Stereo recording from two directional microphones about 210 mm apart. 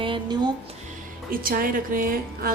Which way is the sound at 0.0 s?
20° right (ahead or behind).